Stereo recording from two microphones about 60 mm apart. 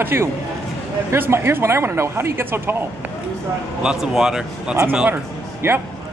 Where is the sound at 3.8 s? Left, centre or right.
Centre.